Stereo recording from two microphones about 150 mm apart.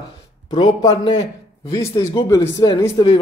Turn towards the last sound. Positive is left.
turn(degrees=25)  # may be behind; listen again after turning